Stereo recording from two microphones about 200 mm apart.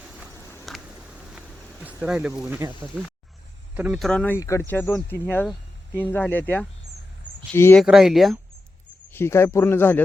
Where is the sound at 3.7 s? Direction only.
5° right (ahead or behind); by 7.8 s 10° left (ahead or behind).